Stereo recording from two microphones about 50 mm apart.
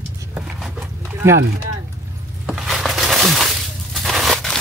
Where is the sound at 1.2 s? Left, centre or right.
Right.